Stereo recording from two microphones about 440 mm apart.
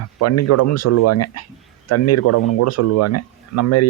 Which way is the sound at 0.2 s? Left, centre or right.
Left.